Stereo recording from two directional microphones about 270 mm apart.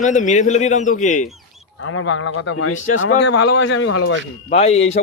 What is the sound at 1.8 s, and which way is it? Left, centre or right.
Speech, left.